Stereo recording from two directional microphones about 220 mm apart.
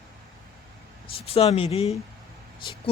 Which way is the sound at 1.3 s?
25° left (ahead or behind).